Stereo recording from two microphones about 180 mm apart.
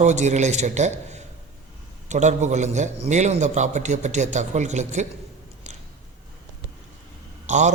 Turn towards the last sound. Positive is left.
turn(degrees=-40)  # may be behind; listen again after turning